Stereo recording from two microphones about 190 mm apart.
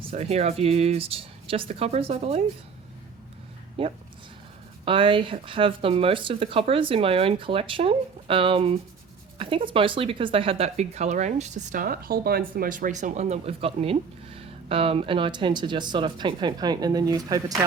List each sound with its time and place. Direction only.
0.0 s speech: 30° right (ahead or behind)
3.8 s speech: 30° right (ahead or behind)